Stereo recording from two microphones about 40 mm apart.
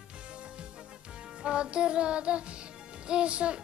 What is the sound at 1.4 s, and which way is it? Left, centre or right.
Music, right.